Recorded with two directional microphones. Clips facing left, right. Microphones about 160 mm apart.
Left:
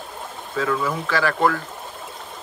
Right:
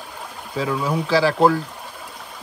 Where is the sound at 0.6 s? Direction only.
15° right (ahead or behind).